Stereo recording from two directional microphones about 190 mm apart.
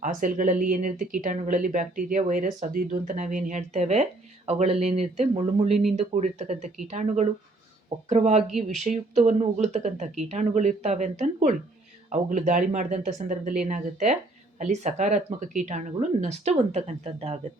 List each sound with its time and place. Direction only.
0.0 s speech: 45° right (ahead or behind)
5.6 s speech: centre (ahead or behind)
6.0 s speech: 35° right (ahead or behind)